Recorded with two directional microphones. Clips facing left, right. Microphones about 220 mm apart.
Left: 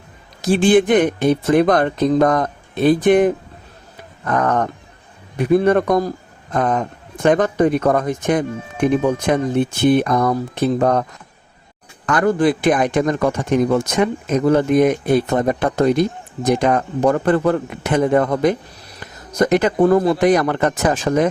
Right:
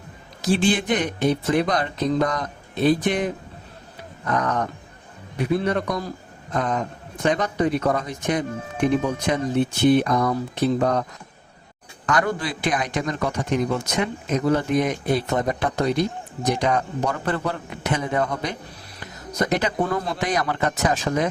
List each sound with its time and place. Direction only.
0.5 s a man's voice: 50° left (ahead or behind)
12.1 s a man's voice: 50° left (ahead or behind)